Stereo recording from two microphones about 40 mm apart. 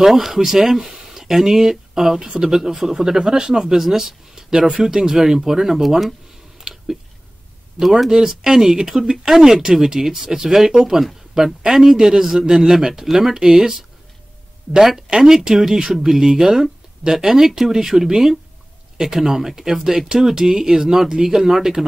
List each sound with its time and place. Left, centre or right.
0.0 s speech: centre
2.1 s speech: right
2.4 s speech: centre
6.7 s a sound: right
7.8 s speech: centre
15.0 s speech: centre